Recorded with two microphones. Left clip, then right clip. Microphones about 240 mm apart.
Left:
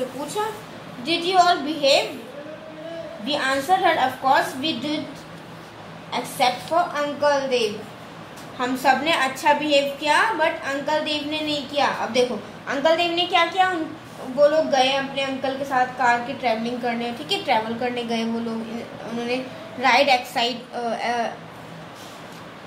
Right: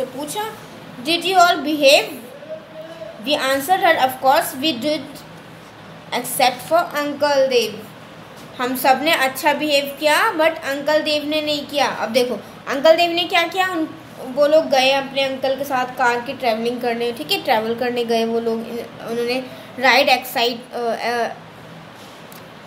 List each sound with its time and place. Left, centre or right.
1.0 s a woman's voice: right
3.3 s a woman's voice: right
6.0 s a woman's voice: right
12.8 s a woman's voice: right
14.4 s a woman's voice: right
19.1 s a woman's voice: right